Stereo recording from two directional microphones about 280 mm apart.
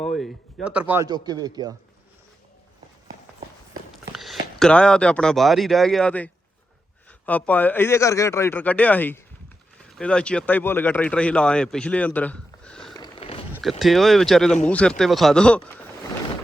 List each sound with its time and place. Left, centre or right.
0.0 s speech: centre
4.1 s a man's voice: centre
13.0 s a sound: centre
13.5 s speech: centre